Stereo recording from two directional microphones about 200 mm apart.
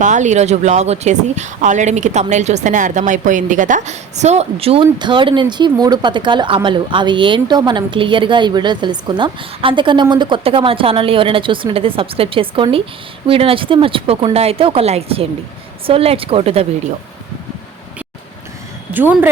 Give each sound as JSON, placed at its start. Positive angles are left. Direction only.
{"t": 0.0, "sound": "speech", "side_deg": -35}
{"t": 18.9, "sound": "speech", "side_deg": -10}